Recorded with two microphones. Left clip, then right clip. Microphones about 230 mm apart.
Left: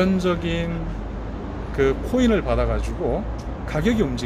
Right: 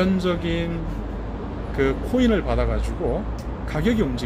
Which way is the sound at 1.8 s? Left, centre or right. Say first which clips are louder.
Left 1 dB; centre.